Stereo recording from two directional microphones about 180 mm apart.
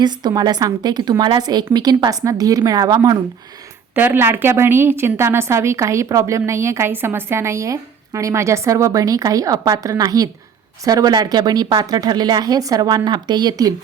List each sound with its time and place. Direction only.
0.0 s a woman's voice: 25° right (ahead or behind)